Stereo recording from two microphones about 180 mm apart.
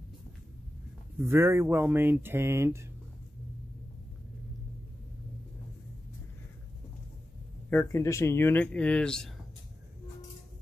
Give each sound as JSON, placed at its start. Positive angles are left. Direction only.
{"t": 1.2, "sound": "speech", "side_deg": -15}
{"t": 7.7, "sound": "speech", "side_deg": 15}